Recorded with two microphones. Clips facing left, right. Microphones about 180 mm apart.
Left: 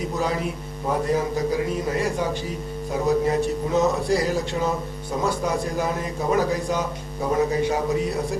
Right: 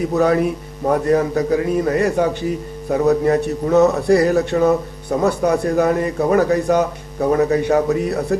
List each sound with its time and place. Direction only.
0.1 s a man's voice: 60° right (ahead or behind)